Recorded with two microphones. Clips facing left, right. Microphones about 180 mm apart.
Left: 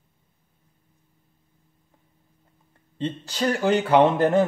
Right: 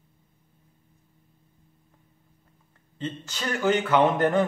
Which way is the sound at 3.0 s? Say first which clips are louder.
Left 7 dB; 35° left (ahead or behind).